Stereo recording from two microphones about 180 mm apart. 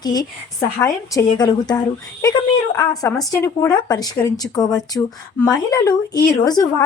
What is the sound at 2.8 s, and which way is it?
Speech, 20° left (ahead or behind).